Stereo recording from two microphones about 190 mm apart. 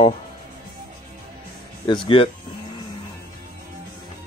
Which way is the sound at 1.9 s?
25° left (ahead or behind).